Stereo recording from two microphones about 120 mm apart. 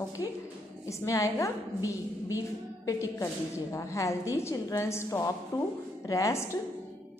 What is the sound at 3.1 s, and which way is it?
A woman's voice, 25° left (ahead or behind).